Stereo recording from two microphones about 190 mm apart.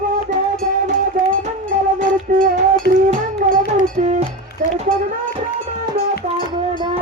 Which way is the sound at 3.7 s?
40° right (ahead or behind).